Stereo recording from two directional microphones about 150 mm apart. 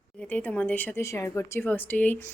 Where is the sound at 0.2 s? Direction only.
10° left (ahead or behind).